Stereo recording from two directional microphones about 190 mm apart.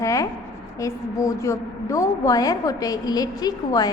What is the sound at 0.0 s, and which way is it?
A woman's voice, 15° left (ahead or behind).